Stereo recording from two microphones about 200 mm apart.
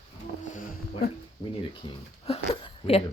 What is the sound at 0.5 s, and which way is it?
Music, 45° left (ahead or behind).